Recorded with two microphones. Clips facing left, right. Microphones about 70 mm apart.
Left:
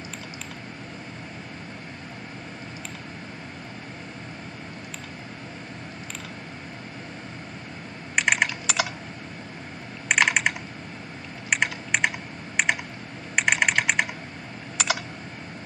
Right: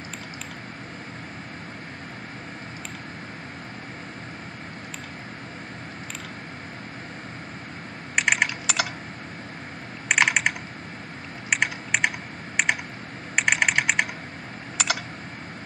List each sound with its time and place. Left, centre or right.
8.2 s typing: centre
10.0 s computer keyboard: centre
11.5 s typing: centre
13.4 s typing: centre